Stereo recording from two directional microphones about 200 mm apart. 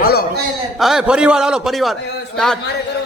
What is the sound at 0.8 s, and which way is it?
A man's voice, centre (ahead or behind).